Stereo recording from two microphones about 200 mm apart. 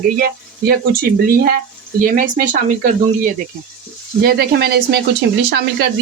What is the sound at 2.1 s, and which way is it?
Speech, 40° right (ahead or behind).